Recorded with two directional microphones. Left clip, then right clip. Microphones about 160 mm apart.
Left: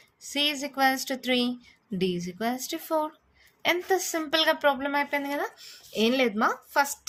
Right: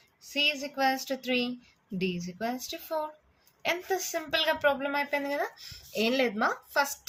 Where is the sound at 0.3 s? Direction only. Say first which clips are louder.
Left 1 dB; 45° left (ahead or behind).